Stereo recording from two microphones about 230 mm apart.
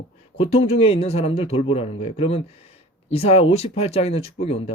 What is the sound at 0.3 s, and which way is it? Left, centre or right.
Speech, left.